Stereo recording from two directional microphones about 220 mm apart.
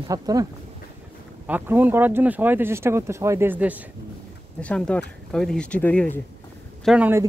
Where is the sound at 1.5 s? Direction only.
10° right (ahead or behind).